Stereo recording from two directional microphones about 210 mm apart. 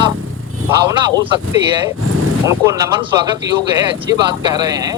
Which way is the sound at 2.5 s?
15° right (ahead or behind).